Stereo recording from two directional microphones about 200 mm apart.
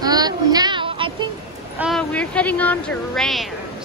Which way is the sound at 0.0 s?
20° right (ahead or behind).